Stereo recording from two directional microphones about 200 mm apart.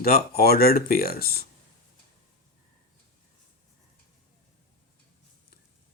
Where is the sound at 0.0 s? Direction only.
50° left (ahead or behind).